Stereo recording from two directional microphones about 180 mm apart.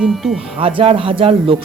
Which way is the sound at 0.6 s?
30° right (ahead or behind).